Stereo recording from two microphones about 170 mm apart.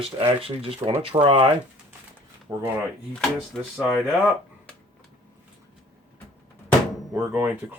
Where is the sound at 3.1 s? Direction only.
5° left (ahead or behind).